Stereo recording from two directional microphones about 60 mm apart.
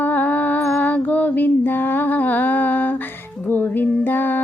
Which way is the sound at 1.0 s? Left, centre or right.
Left.